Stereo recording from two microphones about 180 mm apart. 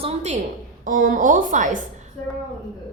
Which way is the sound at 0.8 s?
50° right (ahead or behind).